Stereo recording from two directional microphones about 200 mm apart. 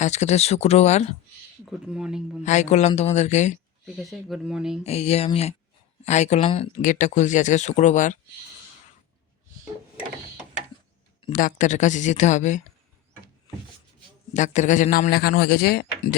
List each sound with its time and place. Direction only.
0.0 s speech: 35° left (ahead or behind)
1.6 s speech: 5° right (ahead or behind)
2.4 s speech: 35° left (ahead or behind)
3.8 s speech: centre (ahead or behind)
4.8 s speech: 30° left (ahead or behind)
6.8 s speech: 40° left (ahead or behind)
11.3 s speech: 40° left (ahead or behind)
14.3 s a man's voice: 35° left (ahead or behind); by 15.8 s 50° left (ahead or behind)